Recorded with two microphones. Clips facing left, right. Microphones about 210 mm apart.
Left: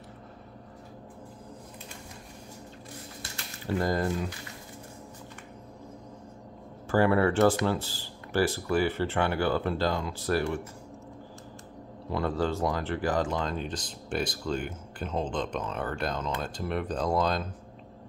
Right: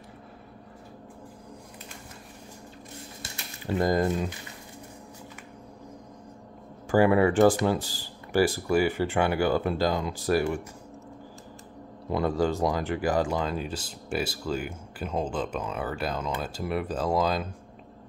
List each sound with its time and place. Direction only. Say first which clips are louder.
3.2 s typing: even; 20° right (ahead or behind)
6.9 s speech: right 3 dB; 15° right (ahead or behind)
12.1 s speech: right 3 dB; 15° right (ahead or behind)